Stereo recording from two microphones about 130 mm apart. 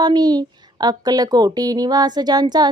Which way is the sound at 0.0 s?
30° right (ahead or behind).